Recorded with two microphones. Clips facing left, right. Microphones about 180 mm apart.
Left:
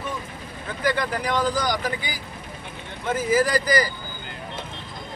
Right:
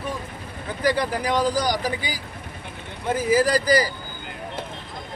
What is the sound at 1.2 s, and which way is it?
Speech, 10° right (ahead or behind).